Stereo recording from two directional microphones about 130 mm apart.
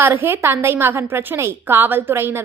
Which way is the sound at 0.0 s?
15° right (ahead or behind).